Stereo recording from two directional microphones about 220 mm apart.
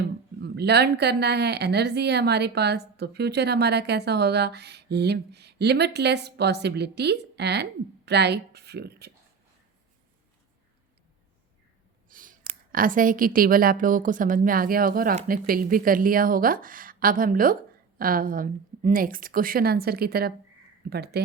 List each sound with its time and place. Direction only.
0.4 s speech: 50° right (ahead or behind)
12.0 s a woman's voice: 40° right (ahead or behind)